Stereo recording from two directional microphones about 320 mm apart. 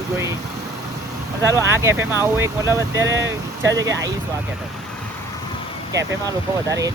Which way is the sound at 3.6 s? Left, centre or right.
Right.